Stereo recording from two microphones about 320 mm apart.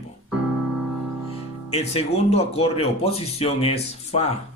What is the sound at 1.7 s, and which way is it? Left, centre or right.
Speech, centre.